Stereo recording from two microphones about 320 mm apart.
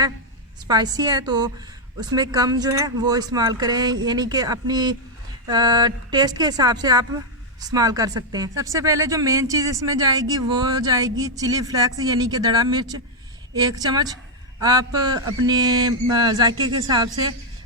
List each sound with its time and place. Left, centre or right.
0.7 s speech: centre